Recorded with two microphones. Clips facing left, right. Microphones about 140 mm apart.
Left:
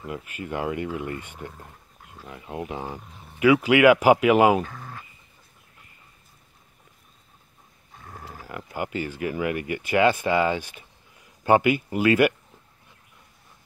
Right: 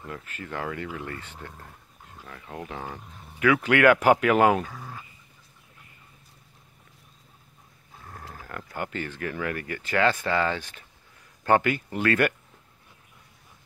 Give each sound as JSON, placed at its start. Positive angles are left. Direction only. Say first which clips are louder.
{"t": 0.0, "sound": "speech", "louder": "left 4 dB", "side_deg": 15}
{"t": 1.6, "sound": "dog", "louder": "left 1 dB", "side_deg": 15}
{"t": 2.2, "sound": "speech", "louder": "left 5 dB", "side_deg": 20}
{"t": 4.6, "sound": "a sound", "louder": "left 1 dB", "side_deg": -5}
{"t": 8.1, "sound": "livestock", "louder": "left 2 dB", "side_deg": 5}
{"t": 8.7, "sound": "speech", "louder": "left 4 dB", "side_deg": 10}